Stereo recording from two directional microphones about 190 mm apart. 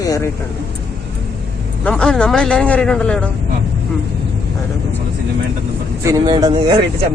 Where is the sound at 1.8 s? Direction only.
5° left (ahead or behind).